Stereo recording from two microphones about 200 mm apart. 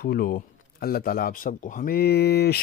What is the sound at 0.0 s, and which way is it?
Speech, 50° left (ahead or behind).